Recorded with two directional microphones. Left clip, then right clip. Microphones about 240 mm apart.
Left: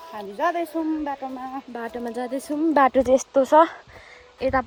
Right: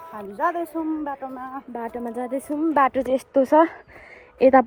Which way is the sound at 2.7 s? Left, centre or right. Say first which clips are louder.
Left 2 dB; left.